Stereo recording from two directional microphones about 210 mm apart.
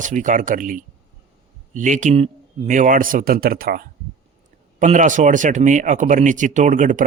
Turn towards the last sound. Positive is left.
turn(degrees=-40)  # may be behind; listen again after turning